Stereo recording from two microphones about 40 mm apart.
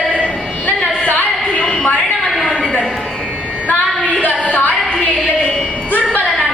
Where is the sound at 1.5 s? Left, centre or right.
Left.